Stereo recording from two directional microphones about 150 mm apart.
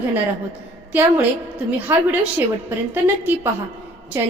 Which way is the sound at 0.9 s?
10° right (ahead or behind).